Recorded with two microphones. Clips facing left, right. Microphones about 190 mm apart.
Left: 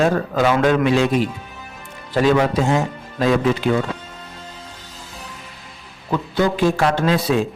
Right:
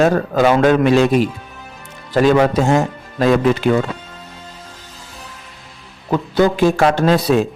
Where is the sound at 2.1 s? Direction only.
50° right (ahead or behind).